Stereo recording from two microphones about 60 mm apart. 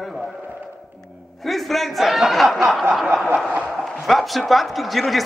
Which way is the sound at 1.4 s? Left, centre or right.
Centre.